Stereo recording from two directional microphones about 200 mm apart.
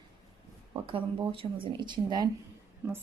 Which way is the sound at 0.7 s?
25° right (ahead or behind).